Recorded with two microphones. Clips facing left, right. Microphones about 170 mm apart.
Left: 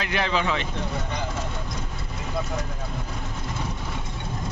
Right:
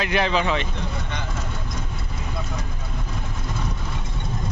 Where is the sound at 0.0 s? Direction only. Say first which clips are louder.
Right 3 dB; 15° right (ahead or behind).